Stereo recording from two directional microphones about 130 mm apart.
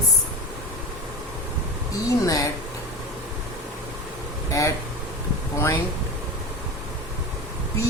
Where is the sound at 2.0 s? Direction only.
25° left (ahead or behind).